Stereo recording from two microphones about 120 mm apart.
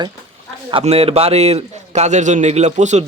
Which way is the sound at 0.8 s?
55° right (ahead or behind).